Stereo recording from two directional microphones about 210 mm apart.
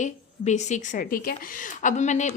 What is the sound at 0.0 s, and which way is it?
A woman's voice, 35° left (ahead or behind).